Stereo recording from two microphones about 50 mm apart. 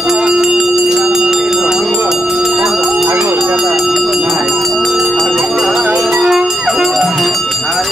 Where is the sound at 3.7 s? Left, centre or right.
Centre.